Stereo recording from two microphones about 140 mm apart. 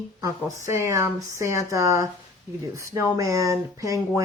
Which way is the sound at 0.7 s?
20° right (ahead or behind).